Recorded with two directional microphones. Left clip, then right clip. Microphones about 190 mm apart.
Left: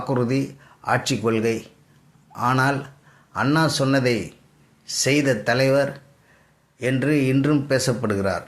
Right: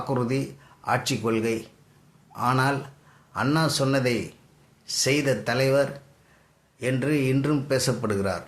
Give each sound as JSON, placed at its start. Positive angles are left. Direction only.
{"t": 0.1, "sound": "speech", "side_deg": 15}